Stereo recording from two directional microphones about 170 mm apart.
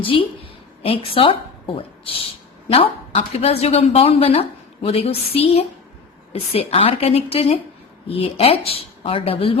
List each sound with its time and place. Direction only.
0.0 s a woman's voice: 30° left (ahead or behind)